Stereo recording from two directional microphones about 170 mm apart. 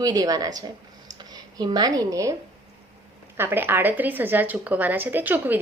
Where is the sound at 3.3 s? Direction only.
10° right (ahead or behind).